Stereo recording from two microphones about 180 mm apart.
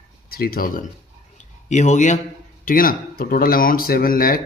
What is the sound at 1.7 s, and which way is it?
Speech, 40° left (ahead or behind).